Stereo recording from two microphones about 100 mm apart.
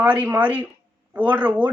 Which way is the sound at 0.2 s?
15° right (ahead or behind).